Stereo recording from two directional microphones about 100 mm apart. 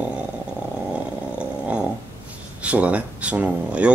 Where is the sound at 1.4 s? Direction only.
10° right (ahead or behind).